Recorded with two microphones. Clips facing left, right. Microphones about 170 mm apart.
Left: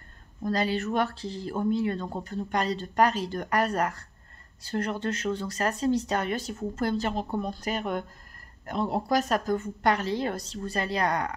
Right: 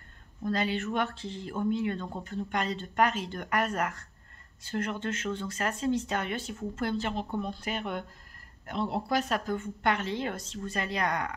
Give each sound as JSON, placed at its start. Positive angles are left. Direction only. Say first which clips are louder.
{"t": 0.4, "sound": "speech", "louder": "left 3 dB", "side_deg": 40}